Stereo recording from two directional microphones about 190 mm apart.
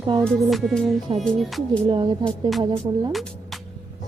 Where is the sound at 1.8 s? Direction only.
25° right (ahead or behind).